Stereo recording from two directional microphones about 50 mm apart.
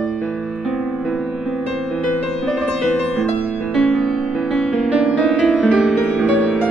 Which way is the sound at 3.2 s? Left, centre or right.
Centre.